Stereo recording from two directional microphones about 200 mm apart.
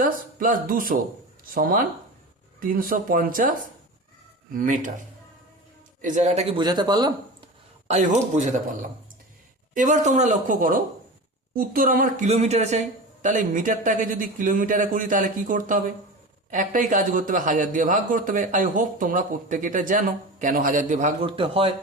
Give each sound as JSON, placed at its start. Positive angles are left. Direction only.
{"t": 0.0, "sound": "speech", "side_deg": -45}
{"t": 4.5, "sound": "a man's voice", "side_deg": -40}
{"t": 6.0, "sound": "a man's voice", "side_deg": -40}
{"t": 6.6, "sound": "speech", "side_deg": -20}
{"t": 7.9, "sound": "a man's voice", "side_deg": -35}
{"t": 9.7, "sound": "a man's voice", "side_deg": -40}
{"t": 21.2, "sound": "a man's voice", "side_deg": -25}